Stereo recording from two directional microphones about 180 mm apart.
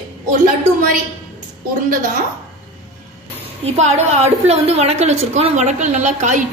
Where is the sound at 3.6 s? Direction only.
35° right (ahead or behind).